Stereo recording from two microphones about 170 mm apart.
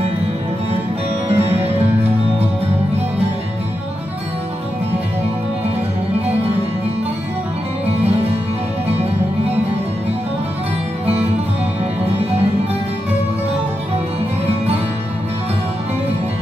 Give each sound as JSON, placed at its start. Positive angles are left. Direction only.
{"t": 1.3, "sound": "music", "side_deg": -35}